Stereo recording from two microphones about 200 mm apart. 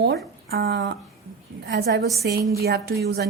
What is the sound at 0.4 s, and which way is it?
A woman's voice, 50° right (ahead or behind).